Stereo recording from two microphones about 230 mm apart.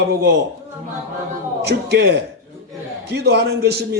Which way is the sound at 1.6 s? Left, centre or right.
Right.